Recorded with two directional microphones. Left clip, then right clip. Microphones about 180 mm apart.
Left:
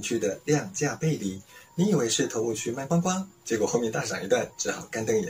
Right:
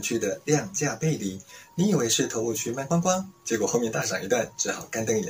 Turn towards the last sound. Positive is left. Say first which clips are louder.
# even
turn(degrees=-15)  # may be behind; listen again after turning